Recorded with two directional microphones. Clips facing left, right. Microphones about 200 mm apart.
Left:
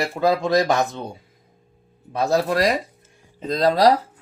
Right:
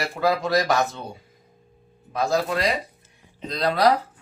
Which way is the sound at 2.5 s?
45° left (ahead or behind).